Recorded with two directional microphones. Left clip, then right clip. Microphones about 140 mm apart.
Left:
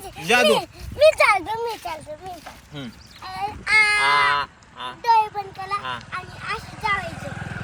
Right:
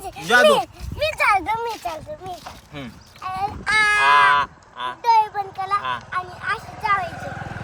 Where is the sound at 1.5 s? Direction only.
45° right (ahead or behind).